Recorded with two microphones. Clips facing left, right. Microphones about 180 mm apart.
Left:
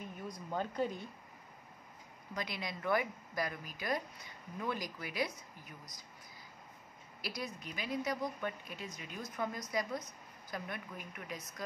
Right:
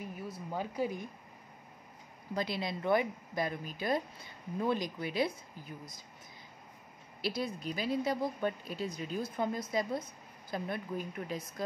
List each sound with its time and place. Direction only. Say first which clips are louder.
0.0 s speech: right 3 dB; 5° right (ahead or behind)
2.3 s speech: right 6 dB; 30° right (ahead or behind)
7.2 s speech: right 7 dB; 25° right (ahead or behind)